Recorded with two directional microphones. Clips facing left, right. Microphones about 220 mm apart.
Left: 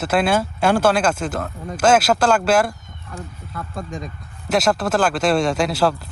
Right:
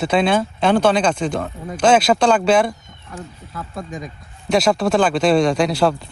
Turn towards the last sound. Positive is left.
turn(degrees=5)  # may be behind; listen again after turning